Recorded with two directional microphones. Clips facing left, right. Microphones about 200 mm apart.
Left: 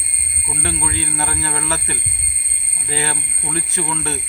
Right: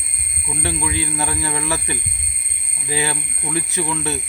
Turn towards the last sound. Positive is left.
turn(degrees=-15)  # may be behind; listen again after turning